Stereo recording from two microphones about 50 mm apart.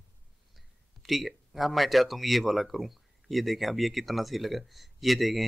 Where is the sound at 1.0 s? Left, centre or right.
Centre.